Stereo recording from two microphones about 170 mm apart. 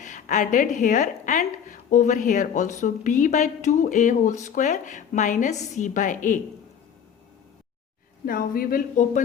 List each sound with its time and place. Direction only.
0.0 s speech: 45° left (ahead or behind)
8.3 s speech: 55° left (ahead or behind)